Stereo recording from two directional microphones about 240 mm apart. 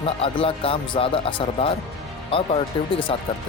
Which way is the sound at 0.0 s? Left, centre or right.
Left.